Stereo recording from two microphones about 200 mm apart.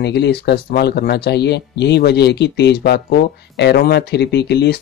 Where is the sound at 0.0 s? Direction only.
55° left (ahead or behind).